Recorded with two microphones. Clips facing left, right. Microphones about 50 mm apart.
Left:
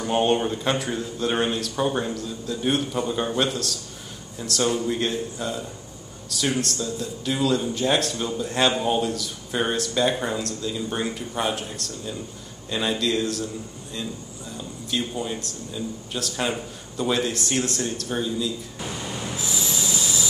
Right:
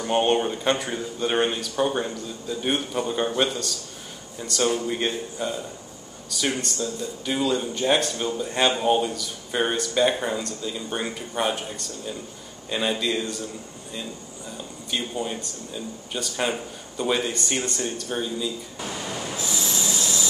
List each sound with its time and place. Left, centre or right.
0.0 s speech: centre
12.7 s speech: centre
14.9 s speech: centre
19.3 s train wheels squealing: centre